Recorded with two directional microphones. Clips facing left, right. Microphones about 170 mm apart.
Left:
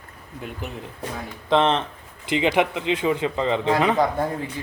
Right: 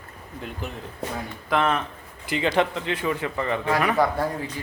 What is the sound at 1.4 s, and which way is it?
A man's voice, 25° left (ahead or behind).